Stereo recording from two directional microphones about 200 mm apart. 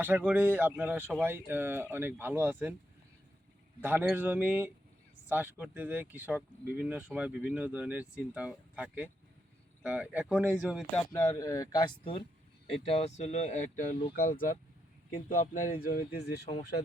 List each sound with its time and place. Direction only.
0.0 s speech: 10° right (ahead or behind)
3.8 s speech: 10° right (ahead or behind); by 11.9 s 20° left (ahead or behind)
12.6 s speech: 30° left (ahead or behind); by 16.5 s 55° left (ahead or behind)